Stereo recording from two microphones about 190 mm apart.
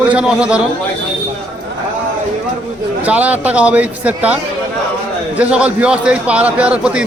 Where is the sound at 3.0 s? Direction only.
10° right (ahead or behind).